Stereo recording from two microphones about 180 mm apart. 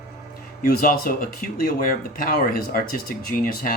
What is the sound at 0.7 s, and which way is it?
Speech, 55° left (ahead or behind).